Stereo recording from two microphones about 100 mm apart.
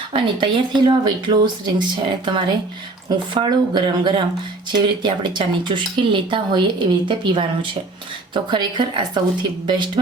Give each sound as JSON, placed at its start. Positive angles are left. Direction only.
{"t": 0.1, "sound": "speech", "side_deg": -55}
{"t": 8.3, "sound": "speech", "side_deg": -50}